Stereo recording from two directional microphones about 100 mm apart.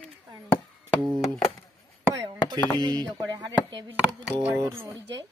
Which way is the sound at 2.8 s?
45° right (ahead or behind).